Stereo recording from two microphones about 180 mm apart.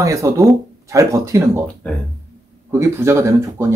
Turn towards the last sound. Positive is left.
turn(degrees=-15)  # may be behind; listen again after turning